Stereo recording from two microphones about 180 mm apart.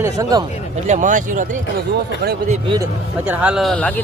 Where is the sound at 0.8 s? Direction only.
45° right (ahead or behind).